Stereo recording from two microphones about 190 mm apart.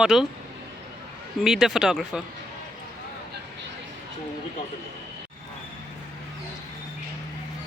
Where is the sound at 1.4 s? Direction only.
Centre (ahead or behind).